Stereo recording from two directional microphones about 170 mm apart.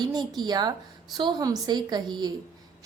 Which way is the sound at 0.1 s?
25° right (ahead or behind).